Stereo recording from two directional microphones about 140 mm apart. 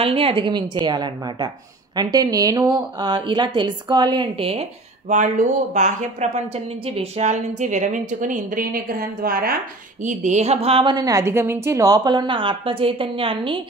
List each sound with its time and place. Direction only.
0.0 s a woman's voice: 40° right (ahead or behind); by 9.6 s 90° right
10.0 s a woman's voice: 60° right (ahead or behind); by 13.6 s 40° right (ahead or behind)